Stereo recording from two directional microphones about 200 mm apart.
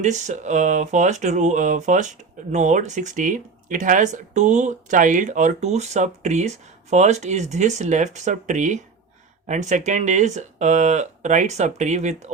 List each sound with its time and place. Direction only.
0.0 s speech: 35° right (ahead or behind)